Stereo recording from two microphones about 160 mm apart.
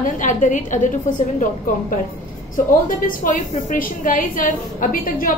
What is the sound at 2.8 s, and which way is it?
A woman's voice, 55° left (ahead or behind).